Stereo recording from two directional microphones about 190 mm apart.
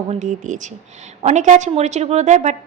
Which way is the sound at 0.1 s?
40° right (ahead or behind).